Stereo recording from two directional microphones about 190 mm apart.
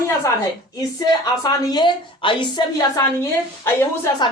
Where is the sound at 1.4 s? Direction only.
20° left (ahead or behind).